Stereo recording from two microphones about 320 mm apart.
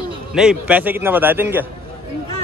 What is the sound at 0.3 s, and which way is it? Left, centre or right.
Speech, centre.